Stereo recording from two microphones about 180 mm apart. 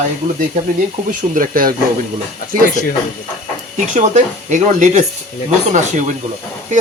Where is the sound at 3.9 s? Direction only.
45° right (ahead or behind).